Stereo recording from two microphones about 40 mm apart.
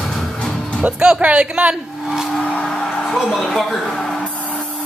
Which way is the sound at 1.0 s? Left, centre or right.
Right.